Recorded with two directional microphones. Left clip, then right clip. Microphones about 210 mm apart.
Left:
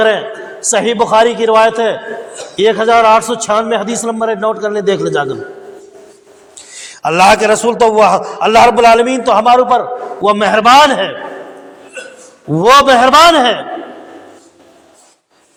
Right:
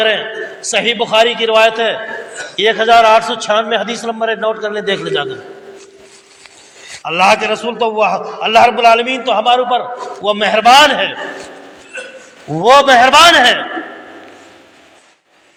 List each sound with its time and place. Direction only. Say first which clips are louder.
0.6 s a man's voice: left 3 dB; 40° left (ahead or behind)
7.0 s a man's voice: left 3 dB; 55° left (ahead or behind)
12.5 s a man's voice: left 1 dB; 40° left (ahead or behind)